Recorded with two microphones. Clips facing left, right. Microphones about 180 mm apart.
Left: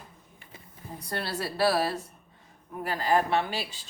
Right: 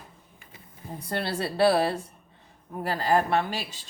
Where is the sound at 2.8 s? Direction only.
35° right (ahead or behind).